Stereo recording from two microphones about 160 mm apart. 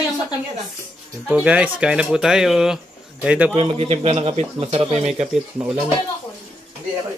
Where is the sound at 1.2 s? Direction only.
10° right (ahead or behind).